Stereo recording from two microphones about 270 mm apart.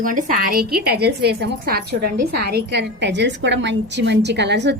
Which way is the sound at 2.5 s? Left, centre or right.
Right.